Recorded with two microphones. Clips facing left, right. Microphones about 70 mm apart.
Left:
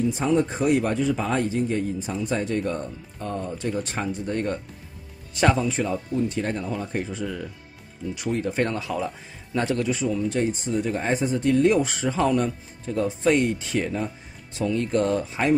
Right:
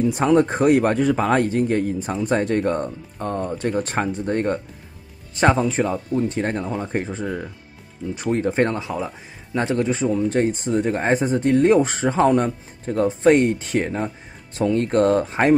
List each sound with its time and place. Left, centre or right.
0.0 s a man's voice: right